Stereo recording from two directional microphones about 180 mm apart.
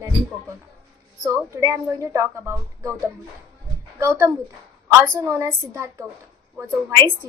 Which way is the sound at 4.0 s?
15° right (ahead or behind).